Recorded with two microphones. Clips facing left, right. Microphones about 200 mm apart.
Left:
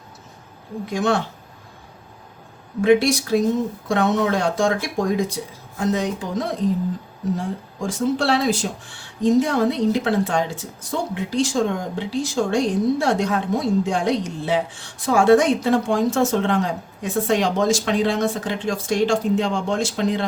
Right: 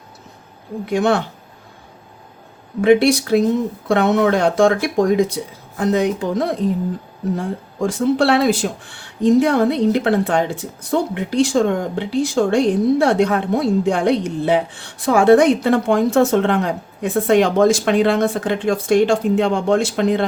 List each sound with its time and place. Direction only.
0.9 s speech: 65° right (ahead or behind)
2.8 s speech: 60° right (ahead or behind)